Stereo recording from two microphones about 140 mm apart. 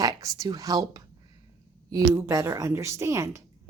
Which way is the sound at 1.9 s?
25° right (ahead or behind).